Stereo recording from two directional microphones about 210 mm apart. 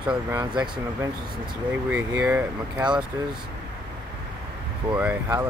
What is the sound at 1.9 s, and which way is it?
Speech, 5° right (ahead or behind).